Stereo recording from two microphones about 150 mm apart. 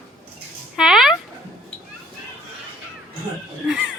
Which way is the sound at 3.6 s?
5° right (ahead or behind).